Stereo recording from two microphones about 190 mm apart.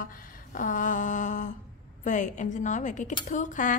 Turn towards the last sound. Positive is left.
turn(degrees=40)  # may be behind; listen again after turning